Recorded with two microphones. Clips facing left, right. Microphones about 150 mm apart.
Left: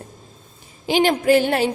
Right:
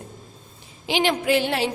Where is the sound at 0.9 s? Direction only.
45° left (ahead or behind).